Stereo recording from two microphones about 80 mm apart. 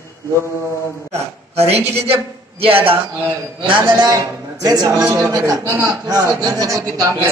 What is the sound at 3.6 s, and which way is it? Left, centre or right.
Speech, right.